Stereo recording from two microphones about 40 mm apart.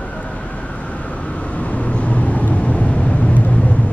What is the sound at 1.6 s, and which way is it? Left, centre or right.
Vehicle, left.